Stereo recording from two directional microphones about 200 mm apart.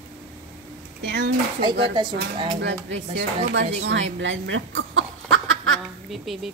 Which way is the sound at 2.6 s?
65° right (ahead or behind).